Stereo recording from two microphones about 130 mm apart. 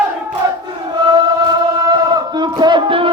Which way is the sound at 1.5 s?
30° right (ahead or behind).